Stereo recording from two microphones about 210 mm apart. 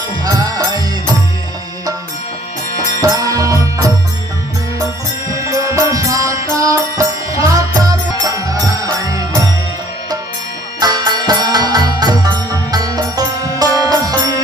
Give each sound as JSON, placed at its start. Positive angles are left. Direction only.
{"t": 0.3, "sound": "music", "side_deg": -15}
{"t": 3.0, "sound": "music", "side_deg": -15}
{"t": 5.3, "sound": "music", "side_deg": -15}
{"t": 10.8, "sound": "music", "side_deg": -20}